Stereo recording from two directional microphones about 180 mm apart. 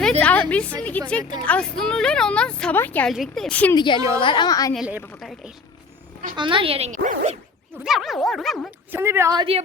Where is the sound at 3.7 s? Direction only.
25° left (ahead or behind).